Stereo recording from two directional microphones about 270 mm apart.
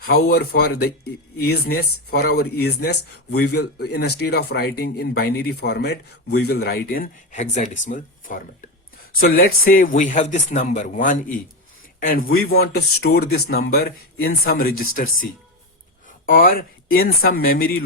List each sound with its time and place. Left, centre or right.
0.1 s speech: left